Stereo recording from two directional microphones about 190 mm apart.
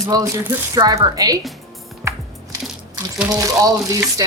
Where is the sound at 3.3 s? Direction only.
20° right (ahead or behind).